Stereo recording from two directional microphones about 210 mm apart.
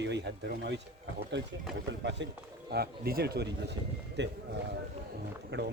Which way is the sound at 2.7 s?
45° right (ahead or behind).